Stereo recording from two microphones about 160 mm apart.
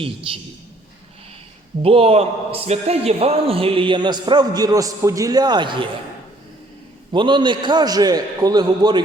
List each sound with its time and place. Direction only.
0.3 s a man's voice: 35° right (ahead or behind)
1.8 s a man's voice: 35° right (ahead or behind)
7.1 s a man's voice: 30° right (ahead or behind)